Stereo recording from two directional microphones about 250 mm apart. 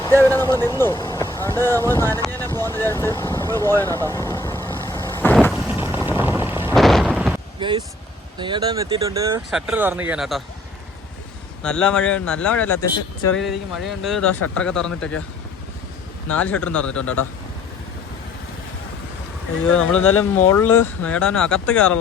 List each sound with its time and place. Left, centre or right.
0.2 s speech: centre
3.9 s vehicle: centre
5.6 s a sound: centre
7.6 s speech: centre
9.5 s speech: centre
11.6 s speech: centre
13.4 s speech: centre
16.3 s speech: centre
19.7 s speech: centre
20.0 s speech: left
20.3 s speech: centre